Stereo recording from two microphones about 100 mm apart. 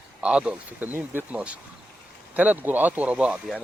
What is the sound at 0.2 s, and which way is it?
Speech, 10° right (ahead or behind).